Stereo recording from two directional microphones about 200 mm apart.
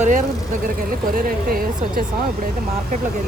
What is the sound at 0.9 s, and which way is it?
Speech, 45° right (ahead or behind).